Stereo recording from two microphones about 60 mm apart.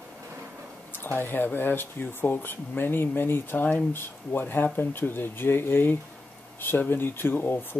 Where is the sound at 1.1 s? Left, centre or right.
Left.